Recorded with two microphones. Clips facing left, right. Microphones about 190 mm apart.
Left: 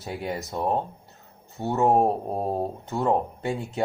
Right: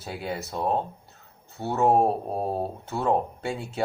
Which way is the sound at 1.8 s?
15° left (ahead or behind).